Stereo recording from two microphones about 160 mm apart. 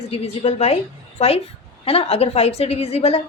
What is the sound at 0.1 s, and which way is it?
A woman's voice, 40° left (ahead or behind).